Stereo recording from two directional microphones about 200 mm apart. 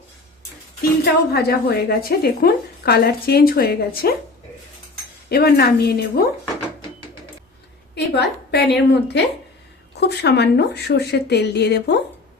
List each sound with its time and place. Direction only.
1.3 s a woman's voice: 50° left (ahead or behind)
5.3 s a woman's voice: 50° left (ahead or behind)
7.9 s a woman's voice: 55° left (ahead or behind)